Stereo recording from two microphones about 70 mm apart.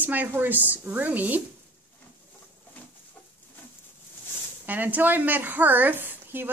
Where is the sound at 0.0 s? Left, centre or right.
Right.